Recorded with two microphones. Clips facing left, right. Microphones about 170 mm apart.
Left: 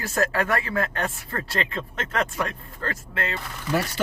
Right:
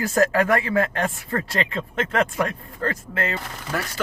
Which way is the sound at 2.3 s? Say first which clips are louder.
Right 4 dB; 45° right (ahead or behind).